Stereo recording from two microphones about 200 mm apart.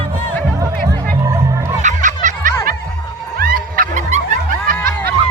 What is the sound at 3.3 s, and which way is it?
Music, 45° right (ahead or behind).